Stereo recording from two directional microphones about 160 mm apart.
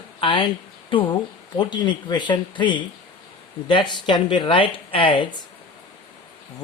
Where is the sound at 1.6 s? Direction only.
30° left (ahead or behind).